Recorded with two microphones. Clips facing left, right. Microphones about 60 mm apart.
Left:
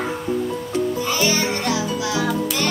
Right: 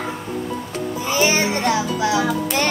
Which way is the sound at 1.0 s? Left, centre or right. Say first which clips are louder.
Right 2 dB; right.